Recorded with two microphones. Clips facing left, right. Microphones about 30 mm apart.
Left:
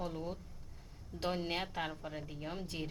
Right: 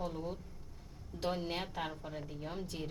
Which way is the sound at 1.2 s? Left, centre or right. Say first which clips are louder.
Even; centre.